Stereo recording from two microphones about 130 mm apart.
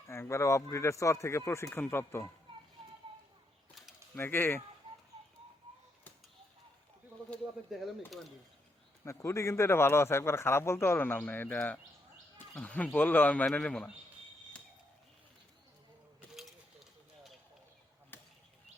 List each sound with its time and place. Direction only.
0.1 s a man's voice: 20° left (ahead or behind)
4.1 s speech: 15° left (ahead or behind)
7.7 s speech: centre (ahead or behind)
9.0 s a man's voice: 20° left (ahead or behind)
16.3 s a sound: centre (ahead or behind)
18.1 s a sound: 15° left (ahead or behind)